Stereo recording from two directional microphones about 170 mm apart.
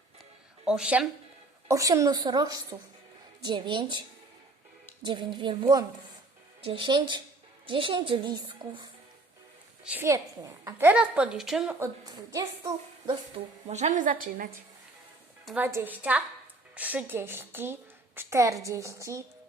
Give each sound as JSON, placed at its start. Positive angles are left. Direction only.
{"t": 0.6, "sound": "speech", "side_deg": -5}
{"t": 1.7, "sound": "a woman's voice", "side_deg": -20}
{"t": 5.0, "sound": "a woman's voice", "side_deg": -25}
{"t": 9.8, "sound": "a woman's voice", "side_deg": -10}
{"t": 11.8, "sound": "a woman's voice", "side_deg": -20}
{"t": 13.3, "sound": "speech", "side_deg": -40}
{"t": 15.4, "sound": "a woman's voice", "side_deg": -10}